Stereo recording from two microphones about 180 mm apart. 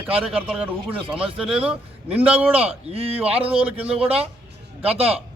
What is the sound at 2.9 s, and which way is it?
Speech, 35° right (ahead or behind).